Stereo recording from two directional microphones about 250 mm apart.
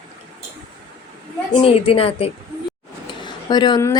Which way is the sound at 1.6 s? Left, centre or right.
Left.